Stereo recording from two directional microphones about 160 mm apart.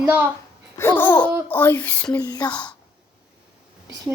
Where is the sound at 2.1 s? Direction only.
25° left (ahead or behind).